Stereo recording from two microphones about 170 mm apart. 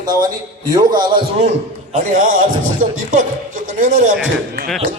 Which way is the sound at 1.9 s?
50° right (ahead or behind).